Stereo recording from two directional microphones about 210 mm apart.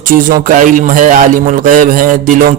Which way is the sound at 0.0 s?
40° right (ahead or behind).